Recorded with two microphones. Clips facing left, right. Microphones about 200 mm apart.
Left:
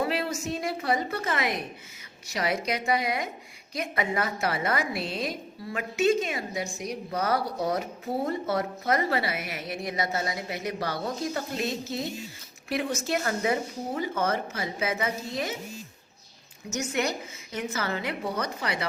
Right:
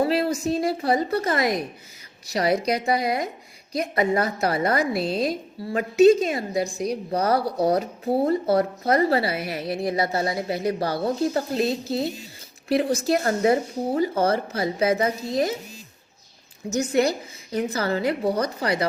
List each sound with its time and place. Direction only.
0.0 s a woman's voice: 35° right (ahead or behind)
16.6 s a woman's voice: 35° right (ahead or behind)